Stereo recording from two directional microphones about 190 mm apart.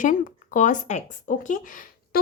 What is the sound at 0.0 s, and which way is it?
Speech, 45° left (ahead or behind).